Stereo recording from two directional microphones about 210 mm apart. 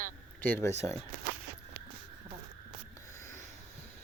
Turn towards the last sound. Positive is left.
turn(degrees=15)  # may be behind; listen again after turning